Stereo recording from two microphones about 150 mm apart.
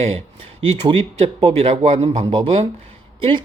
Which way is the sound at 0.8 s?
35° right (ahead or behind).